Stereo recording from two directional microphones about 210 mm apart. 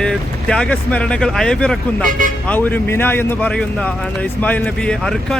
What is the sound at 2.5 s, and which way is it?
Speech, 10° left (ahead or behind).